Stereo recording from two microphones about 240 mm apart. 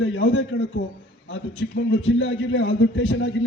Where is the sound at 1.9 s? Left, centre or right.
Left.